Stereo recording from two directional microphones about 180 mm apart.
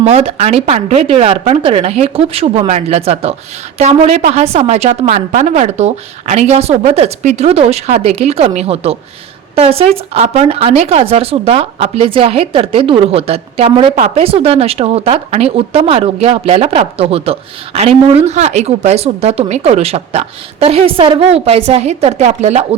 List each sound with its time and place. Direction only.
0.0 s a woman's voice: 35° right (ahead or behind)